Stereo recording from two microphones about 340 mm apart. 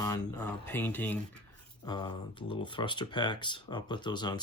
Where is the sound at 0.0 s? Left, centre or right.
Centre.